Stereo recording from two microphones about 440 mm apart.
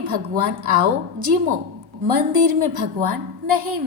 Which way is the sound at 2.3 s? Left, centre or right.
Right.